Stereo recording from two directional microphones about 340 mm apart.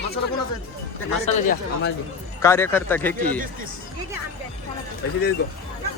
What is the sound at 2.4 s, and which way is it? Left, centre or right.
Speech, centre.